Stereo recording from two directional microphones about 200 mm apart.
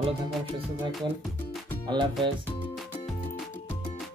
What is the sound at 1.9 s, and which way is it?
Music, 20° right (ahead or behind).